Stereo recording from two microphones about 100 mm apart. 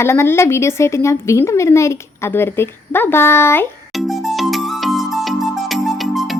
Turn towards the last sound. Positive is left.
turn(degrees=0)  # may be behind; listen again after turning